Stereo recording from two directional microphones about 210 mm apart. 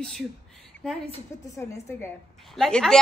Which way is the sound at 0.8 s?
5° left (ahead or behind).